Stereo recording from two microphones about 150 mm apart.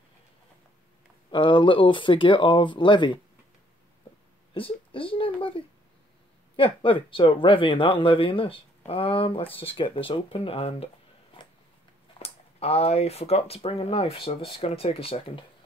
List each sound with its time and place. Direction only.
1.3 s speech: 35° left (ahead or behind)
4.6 s speech: 35° left (ahead or behind)
12.2 s speech: 40° left (ahead or behind)